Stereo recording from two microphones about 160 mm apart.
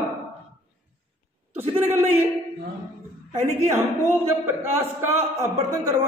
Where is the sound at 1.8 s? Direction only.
15° right (ahead or behind).